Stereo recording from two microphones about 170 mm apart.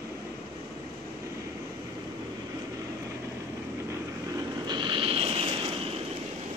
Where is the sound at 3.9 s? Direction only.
25° right (ahead or behind).